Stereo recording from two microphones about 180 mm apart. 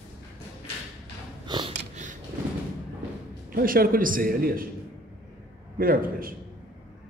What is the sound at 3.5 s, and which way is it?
A man's voice, 50° right (ahead or behind).